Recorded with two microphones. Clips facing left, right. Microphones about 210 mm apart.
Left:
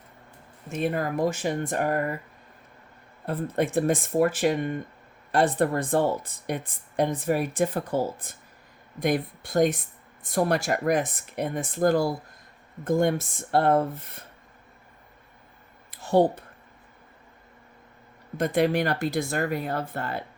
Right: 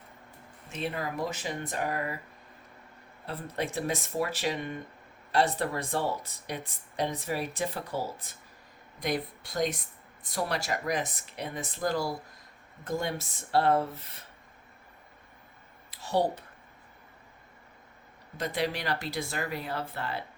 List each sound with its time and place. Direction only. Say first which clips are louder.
0.7 s speech: left 7 dB; 50° left (ahead or behind)
3.2 s speech: left 8 dB; 50° left (ahead or behind)
15.9 s a sound: left 7 dB; 50° left (ahead or behind)
18.3 s speech: left 9 dB; 50° left (ahead or behind)